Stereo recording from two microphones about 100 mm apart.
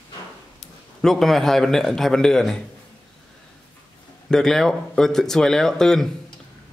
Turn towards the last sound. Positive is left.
turn(degrees=5)  # may be behind; listen again after turning